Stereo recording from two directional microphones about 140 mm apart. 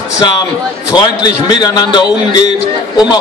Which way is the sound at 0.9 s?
30° left (ahead or behind).